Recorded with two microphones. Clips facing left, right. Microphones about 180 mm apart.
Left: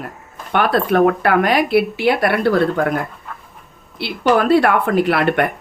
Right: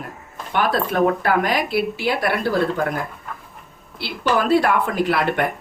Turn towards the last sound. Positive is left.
turn(degrees=65)  # may be behind; listen again after turning